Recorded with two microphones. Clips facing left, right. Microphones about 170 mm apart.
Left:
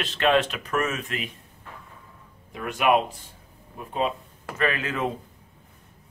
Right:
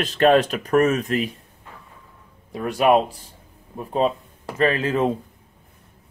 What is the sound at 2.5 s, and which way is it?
Speech, 35° right (ahead or behind).